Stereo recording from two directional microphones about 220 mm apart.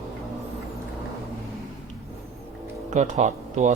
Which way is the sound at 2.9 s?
35° right (ahead or behind).